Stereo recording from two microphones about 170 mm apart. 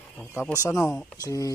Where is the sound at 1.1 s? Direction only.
20° left (ahead or behind).